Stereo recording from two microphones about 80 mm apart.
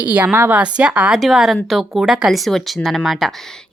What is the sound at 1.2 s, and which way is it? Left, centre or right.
A woman's voice, centre.